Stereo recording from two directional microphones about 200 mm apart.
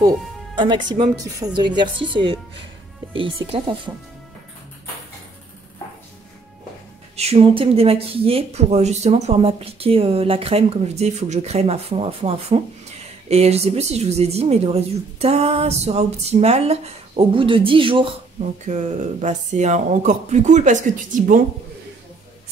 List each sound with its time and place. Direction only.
0.6 s speech: 25° right (ahead or behind)
3.4 s speech: 25° right (ahead or behind)
7.2 s a woman's voice: 30° right (ahead or behind)
18.7 s a woman's voice: 35° right (ahead or behind)